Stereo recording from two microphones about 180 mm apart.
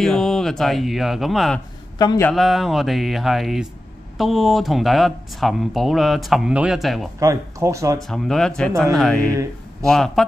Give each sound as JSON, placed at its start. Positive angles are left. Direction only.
{"t": 0.0, "sound": "speech", "side_deg": 0}
{"t": 2.0, "sound": "a man's voice", "side_deg": 20}
{"t": 2.2, "sound": "speech", "side_deg": 0}
{"t": 7.2, "sound": "speech", "side_deg": -15}
{"t": 8.1, "sound": "speech", "side_deg": 0}
{"t": 9.3, "sound": "speech", "side_deg": -15}
{"t": 9.8, "sound": "speech", "side_deg": 0}